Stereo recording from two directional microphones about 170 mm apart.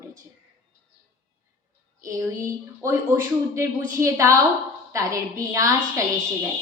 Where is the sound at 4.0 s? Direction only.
15° right (ahead or behind).